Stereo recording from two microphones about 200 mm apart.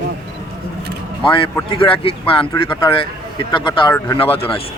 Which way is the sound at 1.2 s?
25° left (ahead or behind).